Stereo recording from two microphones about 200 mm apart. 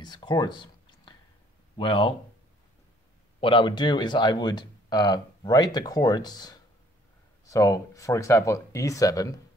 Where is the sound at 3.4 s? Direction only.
25° left (ahead or behind).